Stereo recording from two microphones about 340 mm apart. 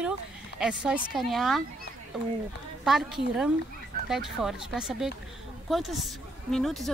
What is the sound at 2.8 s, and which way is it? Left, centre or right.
Speech, centre.